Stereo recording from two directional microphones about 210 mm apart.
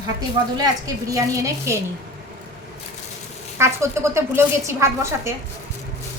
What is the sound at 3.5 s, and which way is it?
A woman's voice, 10° right (ahead or behind).